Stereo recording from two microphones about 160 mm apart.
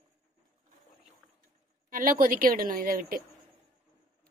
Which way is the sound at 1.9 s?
60° right (ahead or behind).